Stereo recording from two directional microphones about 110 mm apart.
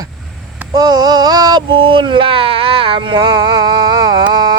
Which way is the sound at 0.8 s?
35° right (ahead or behind).